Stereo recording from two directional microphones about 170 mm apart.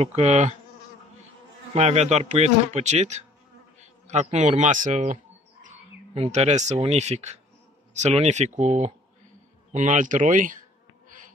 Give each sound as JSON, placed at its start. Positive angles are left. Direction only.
{"t": 0.0, "sound": "a man's voice", "side_deg": -40}
{"t": 1.7, "sound": "a man's voice", "side_deg": -40}